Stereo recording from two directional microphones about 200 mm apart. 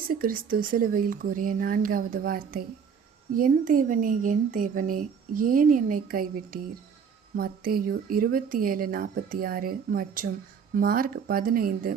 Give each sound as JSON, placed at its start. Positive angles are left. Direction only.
{"t": 0.1, "sound": "speech", "side_deg": -45}